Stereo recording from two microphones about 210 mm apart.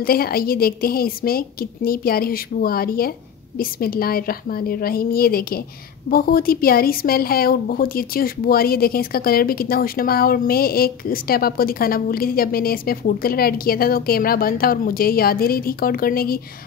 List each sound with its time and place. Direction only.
0.0 s a woman's voice: 45° left (ahead or behind)